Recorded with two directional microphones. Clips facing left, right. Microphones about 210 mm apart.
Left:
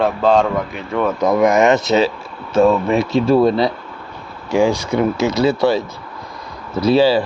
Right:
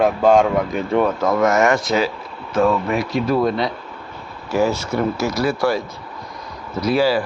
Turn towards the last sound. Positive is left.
turn(degrees=25)  # may be behind; listen again after turning